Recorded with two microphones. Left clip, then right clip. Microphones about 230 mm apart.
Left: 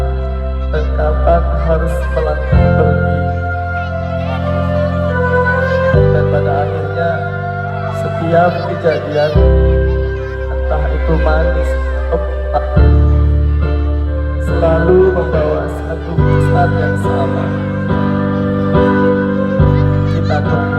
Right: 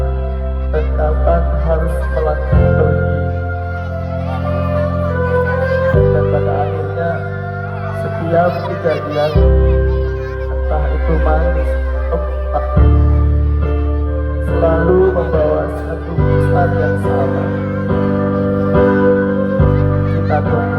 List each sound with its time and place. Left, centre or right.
1.0 s music: left
5.0 s music: left
8.3 s a child's voice: left
12.5 s music: left
14.5 s music: left